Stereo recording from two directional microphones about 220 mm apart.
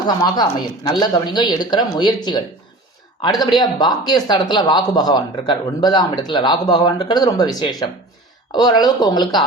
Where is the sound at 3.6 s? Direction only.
20° left (ahead or behind).